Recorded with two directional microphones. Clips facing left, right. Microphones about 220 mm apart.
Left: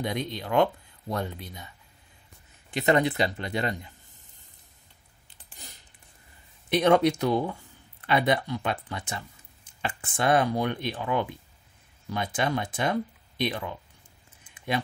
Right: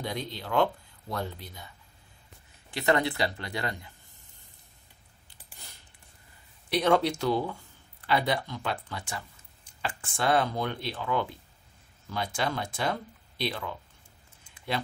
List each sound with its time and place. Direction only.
0.0 s speech: 20° left (ahead or behind)
2.7 s speech: 20° left (ahead or behind)
6.7 s speech: 20° left (ahead or behind)
14.4 s a sound: 20° left (ahead or behind)